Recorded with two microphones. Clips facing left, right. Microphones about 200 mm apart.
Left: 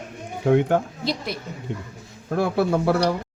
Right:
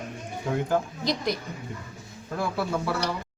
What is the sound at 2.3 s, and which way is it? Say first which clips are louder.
Speech: left 7 dB; 60° left (ahead or behind).